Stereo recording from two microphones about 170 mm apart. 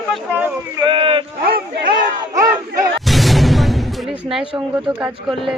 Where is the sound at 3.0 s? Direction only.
Centre (ahead or behind).